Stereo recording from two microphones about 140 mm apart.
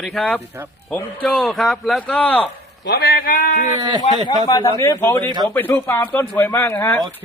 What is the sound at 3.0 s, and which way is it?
Speech, 90° left.